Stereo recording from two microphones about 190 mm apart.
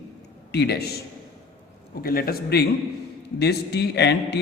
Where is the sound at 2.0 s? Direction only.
50° left (ahead or behind).